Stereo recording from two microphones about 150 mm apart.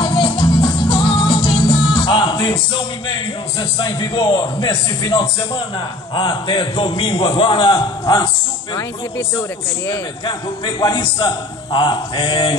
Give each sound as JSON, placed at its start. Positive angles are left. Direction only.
{"t": 0.0, "sound": "music", "side_deg": 35}
{"t": 3.7, "sound": "a man's voice", "side_deg": 30}
{"t": 10.2, "sound": "a man's voice", "side_deg": 30}